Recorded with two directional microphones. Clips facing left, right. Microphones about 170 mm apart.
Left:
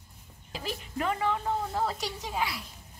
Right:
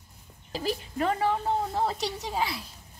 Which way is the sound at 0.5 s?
40° right (ahead or behind).